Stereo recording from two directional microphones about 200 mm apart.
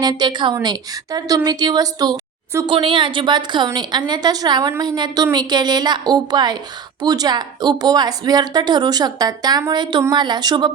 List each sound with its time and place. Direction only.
0.0 s a woman's voice: 20° right (ahead or behind)